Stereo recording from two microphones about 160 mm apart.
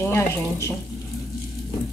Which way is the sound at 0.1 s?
15° left (ahead or behind).